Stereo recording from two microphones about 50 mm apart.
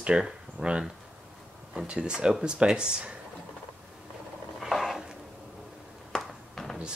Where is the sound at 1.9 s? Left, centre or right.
Centre.